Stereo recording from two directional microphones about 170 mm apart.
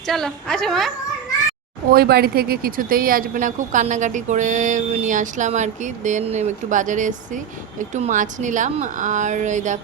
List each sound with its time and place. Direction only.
0.1 s a woman's voice: 5° left (ahead or behind)
1.9 s speech: 65° right (ahead or behind); by 9.7 s 45° right (ahead or behind)